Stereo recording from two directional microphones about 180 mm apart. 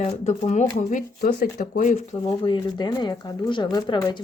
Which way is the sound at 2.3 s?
25° left (ahead or behind).